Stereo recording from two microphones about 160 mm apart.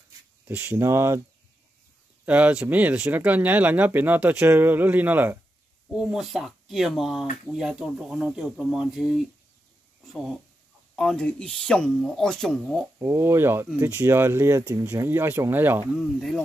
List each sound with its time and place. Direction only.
0.5 s speech: 10° right (ahead or behind)
2.2 s speech: 10° right (ahead or behind)
11.0 s speech: 5° left (ahead or behind)
13.0 s speech: 15° right (ahead or behind)
15.9 s speech: centre (ahead or behind)